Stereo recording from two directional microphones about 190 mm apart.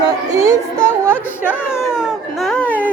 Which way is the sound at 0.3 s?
15° right (ahead or behind).